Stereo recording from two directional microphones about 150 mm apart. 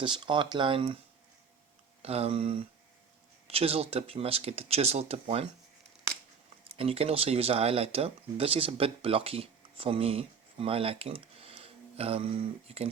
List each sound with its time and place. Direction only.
0.0 s speech: 35° right (ahead or behind)
2.0 s speech: 40° right (ahead or behind)
6.7 s speech: 40° right (ahead or behind)